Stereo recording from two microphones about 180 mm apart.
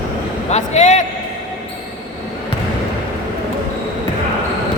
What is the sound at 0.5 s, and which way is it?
Speech, 40° left (ahead or behind).